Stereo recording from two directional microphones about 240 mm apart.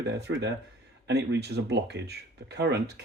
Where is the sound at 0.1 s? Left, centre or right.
Right.